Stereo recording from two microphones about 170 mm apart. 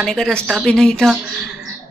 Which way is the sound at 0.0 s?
5° left (ahead or behind).